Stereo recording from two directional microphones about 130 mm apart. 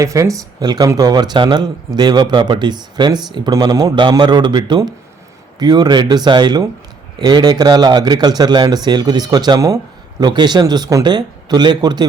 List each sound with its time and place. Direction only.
0.0 s speech: 25° right (ahead or behind)